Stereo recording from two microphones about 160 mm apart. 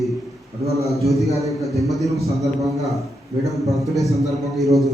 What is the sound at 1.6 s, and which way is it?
A man's voice, centre (ahead or behind).